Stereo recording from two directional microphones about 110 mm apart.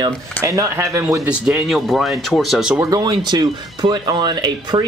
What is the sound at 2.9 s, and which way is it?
Speech, 35° right (ahead or behind).